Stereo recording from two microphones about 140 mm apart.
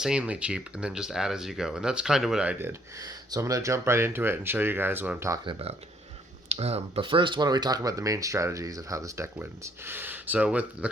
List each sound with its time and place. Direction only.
0.0 s speech: 5° right (ahead or behind)
3.0 s speech: 25° right (ahead or behind)
5.5 s speech: 45° right (ahead or behind); by 10.8 s 10° right (ahead or behind)